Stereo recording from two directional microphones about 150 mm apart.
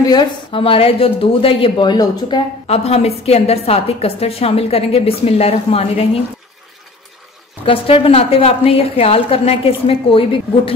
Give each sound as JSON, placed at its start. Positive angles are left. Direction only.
{"t": 0.0, "sound": "a woman's voice", "side_deg": 30}
{"t": 2.6, "sound": "a woman's voice", "side_deg": 45}
{"t": 7.6, "sound": "a woman's voice", "side_deg": 40}